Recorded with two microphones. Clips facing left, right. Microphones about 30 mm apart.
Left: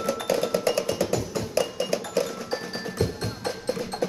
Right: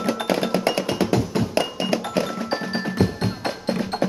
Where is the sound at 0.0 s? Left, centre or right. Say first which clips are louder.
Right 3 dB; right.